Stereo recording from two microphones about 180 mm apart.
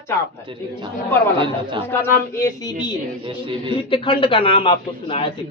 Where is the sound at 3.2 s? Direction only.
30° right (ahead or behind).